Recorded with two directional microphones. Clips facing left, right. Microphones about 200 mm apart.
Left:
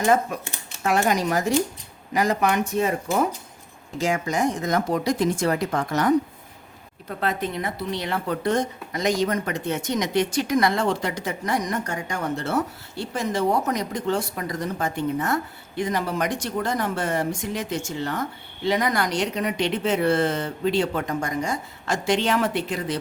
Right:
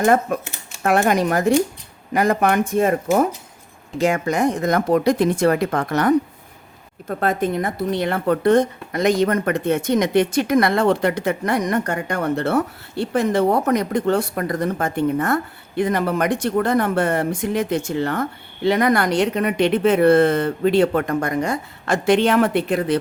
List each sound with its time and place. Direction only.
0.0 s speech: 55° right (ahead or behind)